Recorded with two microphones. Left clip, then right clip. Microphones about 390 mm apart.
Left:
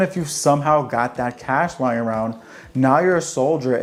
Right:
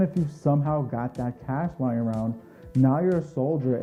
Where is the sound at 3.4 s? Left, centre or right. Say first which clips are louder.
Left 9 dB; left.